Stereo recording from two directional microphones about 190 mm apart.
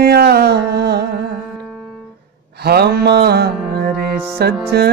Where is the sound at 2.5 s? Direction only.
55° right (ahead or behind).